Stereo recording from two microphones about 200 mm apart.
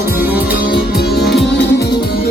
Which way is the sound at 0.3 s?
10° right (ahead or behind).